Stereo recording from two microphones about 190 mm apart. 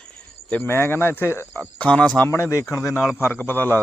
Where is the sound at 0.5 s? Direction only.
10° left (ahead or behind).